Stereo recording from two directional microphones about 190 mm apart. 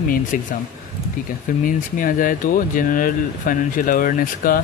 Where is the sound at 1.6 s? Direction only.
45° left (ahead or behind).